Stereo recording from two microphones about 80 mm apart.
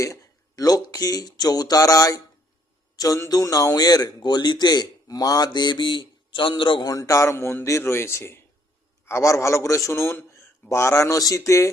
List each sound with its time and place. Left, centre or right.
0.0 s speech: left
2.9 s a sound: left
3.2 s a man's voice: left
6.8 s a man's voice: left